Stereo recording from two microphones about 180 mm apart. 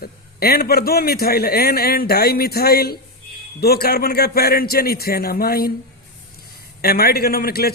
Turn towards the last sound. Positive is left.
turn(degrees=60)  # may be behind; listen again after turning